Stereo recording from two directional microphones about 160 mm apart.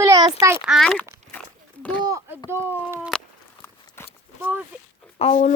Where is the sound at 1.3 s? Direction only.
10° left (ahead or behind).